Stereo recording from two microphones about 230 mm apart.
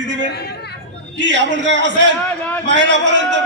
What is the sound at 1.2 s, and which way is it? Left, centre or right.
A man's voice, right.